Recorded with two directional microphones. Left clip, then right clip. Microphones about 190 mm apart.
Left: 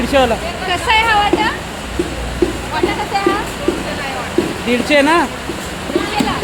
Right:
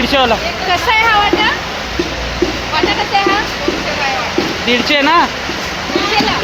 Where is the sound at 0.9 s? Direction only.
45° left (ahead or behind).